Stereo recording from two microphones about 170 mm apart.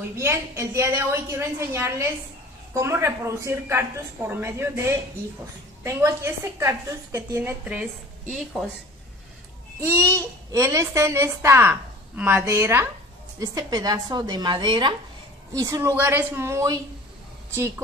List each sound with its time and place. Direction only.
0.1 s a child's voice: 15° right (ahead or behind)
9.8 s a child's voice: 15° right (ahead or behind)